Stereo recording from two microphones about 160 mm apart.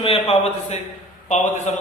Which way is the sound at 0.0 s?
35° left (ahead or behind).